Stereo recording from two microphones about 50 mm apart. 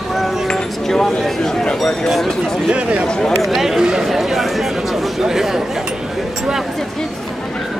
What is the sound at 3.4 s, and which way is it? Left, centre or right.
Speech, centre.